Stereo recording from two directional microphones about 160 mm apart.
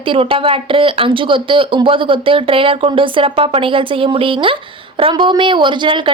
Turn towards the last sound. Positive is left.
turn(degrees=-30)  # may be behind; listen again after turning